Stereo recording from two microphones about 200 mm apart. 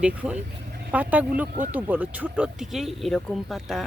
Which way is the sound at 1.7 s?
10° right (ahead or behind).